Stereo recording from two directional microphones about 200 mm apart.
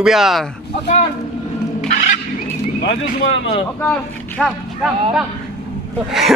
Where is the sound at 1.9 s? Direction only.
35° left (ahead or behind).